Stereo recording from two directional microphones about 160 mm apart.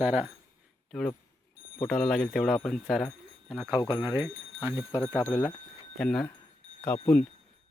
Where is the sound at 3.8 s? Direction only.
25° left (ahead or behind).